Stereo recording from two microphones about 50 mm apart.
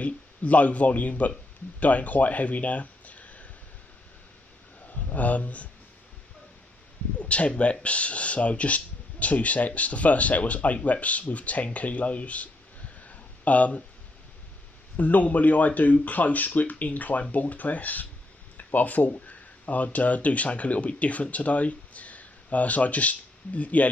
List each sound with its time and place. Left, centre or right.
0.0 s speech: left
4.8 s speech: left
7.2 s speech: left
13.0 s a sound: left
15.0 s speech: left